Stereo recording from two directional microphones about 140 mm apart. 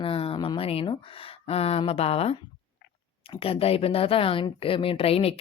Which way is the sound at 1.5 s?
45° left (ahead or behind).